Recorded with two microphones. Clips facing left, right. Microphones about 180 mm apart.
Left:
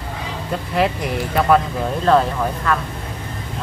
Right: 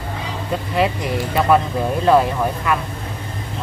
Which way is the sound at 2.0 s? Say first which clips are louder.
Right 1 dB; 10° right (ahead or behind).